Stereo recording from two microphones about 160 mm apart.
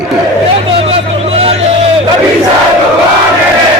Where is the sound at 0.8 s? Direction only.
40° right (ahead or behind).